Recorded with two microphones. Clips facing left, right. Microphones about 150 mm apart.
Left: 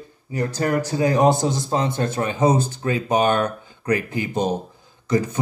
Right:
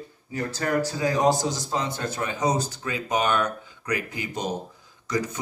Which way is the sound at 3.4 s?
30° left (ahead or behind).